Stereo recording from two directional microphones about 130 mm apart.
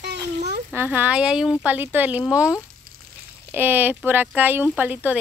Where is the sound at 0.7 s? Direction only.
15° right (ahead or behind).